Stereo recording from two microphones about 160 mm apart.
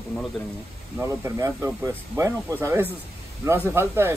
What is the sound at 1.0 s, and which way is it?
Speech, 15° right (ahead or behind).